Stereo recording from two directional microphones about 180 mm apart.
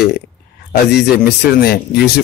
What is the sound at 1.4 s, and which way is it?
Speech, 60° left (ahead or behind).